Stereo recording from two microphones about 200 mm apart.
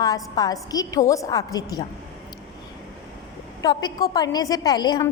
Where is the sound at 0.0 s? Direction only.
20° left (ahead or behind).